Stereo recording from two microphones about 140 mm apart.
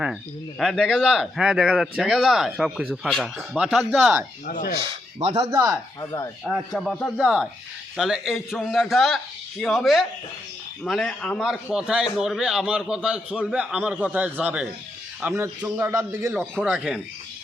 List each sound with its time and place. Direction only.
0.6 s a man's voice: centre (ahead or behind)
4.4 s speech: 90° left
5.5 s a man's voice: 25° right (ahead or behind)
6.0 s speech: 25° left (ahead or behind)
6.4 s a man's voice: centre (ahead or behind); by 16.3 s 20° right (ahead or behind)
16.4 s a man's voice: centre (ahead or behind)